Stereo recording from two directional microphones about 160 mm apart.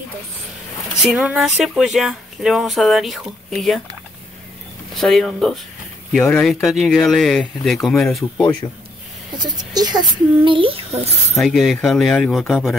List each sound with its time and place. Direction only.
1.0 s speech: 5° right (ahead or behind)
4.9 s speech: centre (ahead or behind)
9.4 s speech: 25° right (ahead or behind)
11.3 s speech: centre (ahead or behind)